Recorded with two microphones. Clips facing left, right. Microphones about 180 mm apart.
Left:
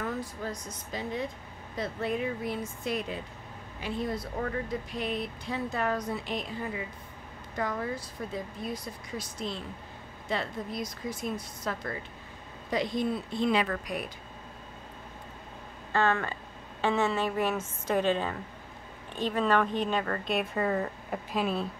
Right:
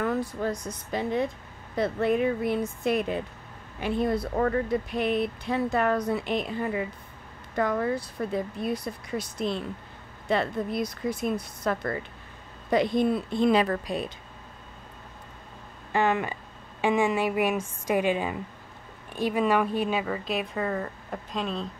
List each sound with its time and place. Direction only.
0.0 s a woman's voice: 65° right (ahead or behind)
13.5 s speech: 35° right (ahead or behind)
15.9 s a woman's voice: 15° right (ahead or behind); by 21.6 s 5° left (ahead or behind)